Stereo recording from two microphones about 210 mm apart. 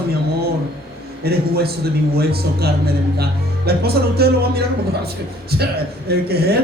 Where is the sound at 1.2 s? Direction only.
50° right (ahead or behind).